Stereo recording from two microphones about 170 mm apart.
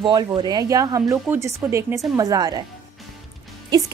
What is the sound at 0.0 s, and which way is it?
A woman's voice, 25° right (ahead or behind).